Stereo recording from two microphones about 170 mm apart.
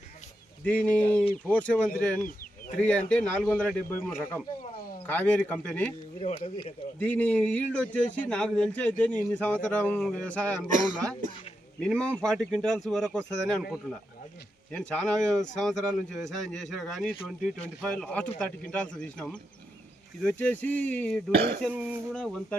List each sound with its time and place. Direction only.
0.6 s a man's voice: 10° left (ahead or behind)
6.2 s speech: 35° left (ahead or behind)
7.0 s a man's voice: 10° left (ahead or behind)
10.6 s a man's voice: 5° right (ahead or behind)
21.7 s speech: 10° right (ahead or behind)
22.1 s a man's voice: 5° left (ahead or behind)